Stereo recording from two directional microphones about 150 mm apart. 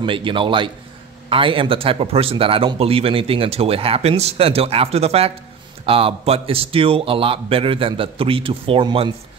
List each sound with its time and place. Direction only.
0.0 s speech: 35° right (ahead or behind)